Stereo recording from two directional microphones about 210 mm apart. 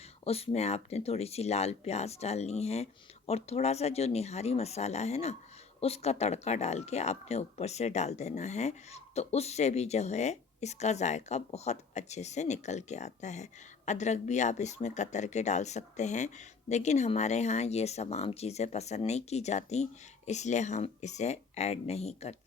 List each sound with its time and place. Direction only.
0.3 s speech: 30° left (ahead or behind)